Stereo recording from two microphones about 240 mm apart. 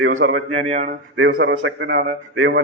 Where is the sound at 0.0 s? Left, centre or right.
Right.